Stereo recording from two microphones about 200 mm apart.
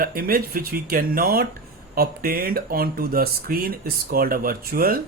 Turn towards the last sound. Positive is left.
turn(degrees=-45)  # may be behind; listen again after turning